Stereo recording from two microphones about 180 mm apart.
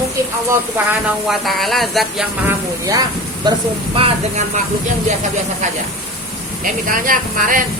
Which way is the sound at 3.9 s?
35° right (ahead or behind).